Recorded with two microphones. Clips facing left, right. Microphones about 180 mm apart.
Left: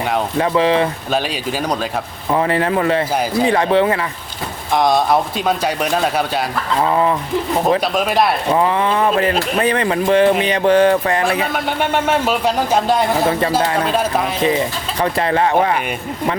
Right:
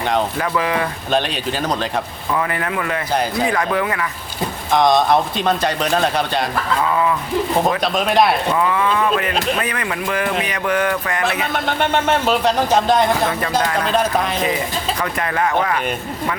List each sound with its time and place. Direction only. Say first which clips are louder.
0.3 s speech: left 5 dB; 25° left (ahead or behind)
2.3 s speech: left 5 dB; 30° left (ahead or behind)
4.7 s speech: even; 5° left (ahead or behind)
6.8 s speech: left 4 dB; 35° left (ahead or behind)
7.9 s speech: even; 5° left (ahead or behind)
8.5 s speech: left 2 dB; 30° left (ahead or behind)
11.5 s speech: even; 10° left (ahead or behind)
15.0 s speech: left 7 dB; 30° left (ahead or behind)